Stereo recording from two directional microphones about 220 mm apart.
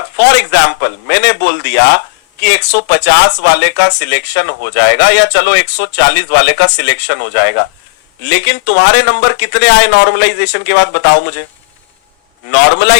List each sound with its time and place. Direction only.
0.2 s a man's voice: 50° left (ahead or behind)
12.5 s speech: 50° left (ahead or behind)